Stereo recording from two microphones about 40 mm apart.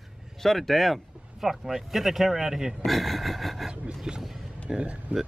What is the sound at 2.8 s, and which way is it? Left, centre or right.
Speech, centre.